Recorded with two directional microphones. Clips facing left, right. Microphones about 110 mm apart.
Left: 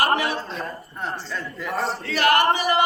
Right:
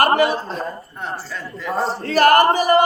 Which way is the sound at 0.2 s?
45° right (ahead or behind).